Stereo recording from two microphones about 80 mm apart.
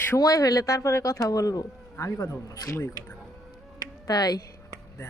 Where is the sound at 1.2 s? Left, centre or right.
Left.